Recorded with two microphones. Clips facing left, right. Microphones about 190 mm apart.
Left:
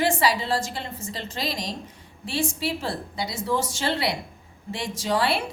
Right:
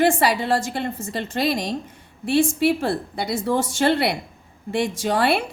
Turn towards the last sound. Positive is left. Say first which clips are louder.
# right 4 dB
turn(degrees=-55)  # may be behind; listen again after turning